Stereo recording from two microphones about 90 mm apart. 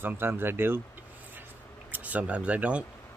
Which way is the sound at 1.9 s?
15° right (ahead or behind).